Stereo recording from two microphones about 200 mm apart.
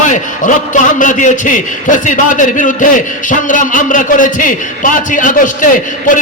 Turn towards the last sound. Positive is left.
turn(degrees=40)  # may be behind; listen again after turning